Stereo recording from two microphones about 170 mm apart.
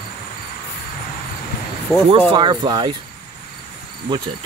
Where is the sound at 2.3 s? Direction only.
25° right (ahead or behind).